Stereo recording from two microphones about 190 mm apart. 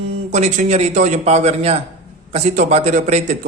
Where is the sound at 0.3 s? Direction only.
35° right (ahead or behind).